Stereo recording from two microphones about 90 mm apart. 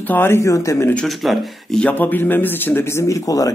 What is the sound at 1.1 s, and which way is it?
Speech, centre (ahead or behind).